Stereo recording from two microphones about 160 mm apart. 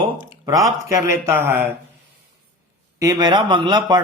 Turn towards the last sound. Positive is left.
turn(degrees=-25)  # may be behind; listen again after turning